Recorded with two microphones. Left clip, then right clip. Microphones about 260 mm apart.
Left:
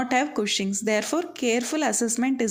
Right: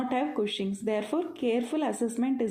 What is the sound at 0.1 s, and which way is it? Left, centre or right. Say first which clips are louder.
Speech: left 6 dB; left.